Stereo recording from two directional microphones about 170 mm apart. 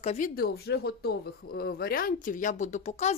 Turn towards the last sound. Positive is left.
turn(degrees=40)  # may be behind; listen again after turning